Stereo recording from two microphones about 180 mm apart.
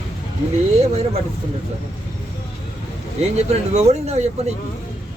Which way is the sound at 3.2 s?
40° right (ahead or behind).